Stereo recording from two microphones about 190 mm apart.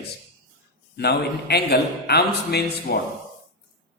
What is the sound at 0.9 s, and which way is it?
A man's voice, 60° left (ahead or behind).